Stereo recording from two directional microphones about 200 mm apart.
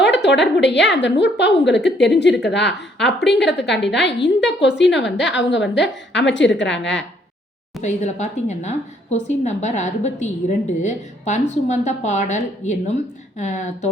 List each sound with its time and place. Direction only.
0.0 s a woman's voice: 60° left (ahead or behind)
7.8 s a woman's voice: 35° left (ahead or behind)